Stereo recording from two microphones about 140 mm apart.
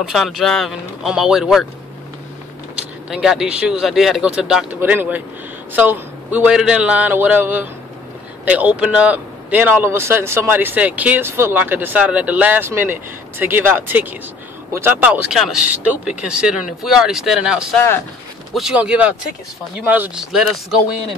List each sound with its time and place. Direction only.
0.0 s speech: centre (ahead or behind)
3.1 s speech: 5° right (ahead or behind)
17.7 s speech: 15° left (ahead or behind)
18.5 s speech: 5° right (ahead or behind)